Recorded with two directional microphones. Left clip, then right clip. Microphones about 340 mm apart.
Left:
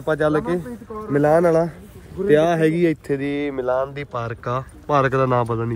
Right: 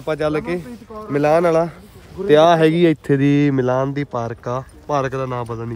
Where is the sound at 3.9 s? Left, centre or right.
Centre.